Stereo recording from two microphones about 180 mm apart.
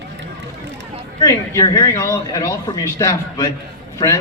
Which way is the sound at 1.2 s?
20° left (ahead or behind).